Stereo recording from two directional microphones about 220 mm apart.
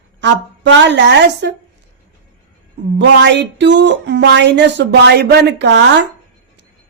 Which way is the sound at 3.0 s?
55° right (ahead or behind).